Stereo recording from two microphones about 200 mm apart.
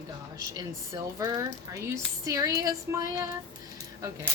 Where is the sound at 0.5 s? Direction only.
20° right (ahead or behind).